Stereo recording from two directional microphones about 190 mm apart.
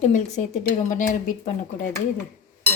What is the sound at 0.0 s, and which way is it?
Speech, 40° left (ahead or behind).